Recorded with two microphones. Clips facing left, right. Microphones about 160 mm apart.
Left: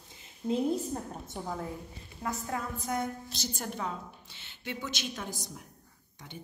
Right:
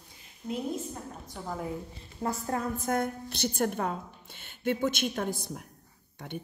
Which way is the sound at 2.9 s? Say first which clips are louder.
Right 3 dB; 60° right (ahead or behind).